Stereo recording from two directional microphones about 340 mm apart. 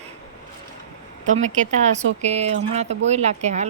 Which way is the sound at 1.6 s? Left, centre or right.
Right.